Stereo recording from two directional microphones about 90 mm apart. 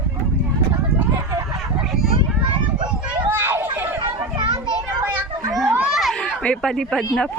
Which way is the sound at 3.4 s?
25° right (ahead or behind).